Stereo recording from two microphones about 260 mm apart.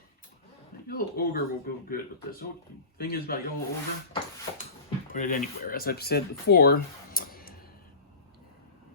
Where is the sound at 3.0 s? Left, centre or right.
Left.